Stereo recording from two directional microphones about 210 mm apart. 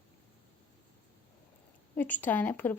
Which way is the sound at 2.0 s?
10° left (ahead or behind).